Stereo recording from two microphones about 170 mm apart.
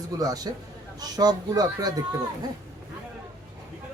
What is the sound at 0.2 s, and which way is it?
Speech, 20° right (ahead or behind).